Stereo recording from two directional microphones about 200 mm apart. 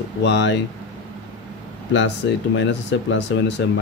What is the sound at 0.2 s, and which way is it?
Speech, 65° left (ahead or behind).